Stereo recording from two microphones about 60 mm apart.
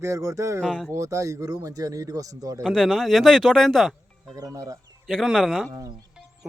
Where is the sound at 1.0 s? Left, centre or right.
Right.